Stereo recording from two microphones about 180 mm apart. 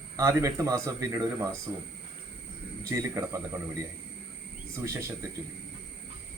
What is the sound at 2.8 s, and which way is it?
Speech, 15° right (ahead or behind).